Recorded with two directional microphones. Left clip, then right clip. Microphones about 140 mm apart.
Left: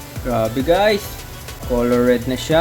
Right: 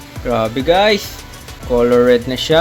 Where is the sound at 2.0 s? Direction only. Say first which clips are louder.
Right 5 dB; 10° right (ahead or behind).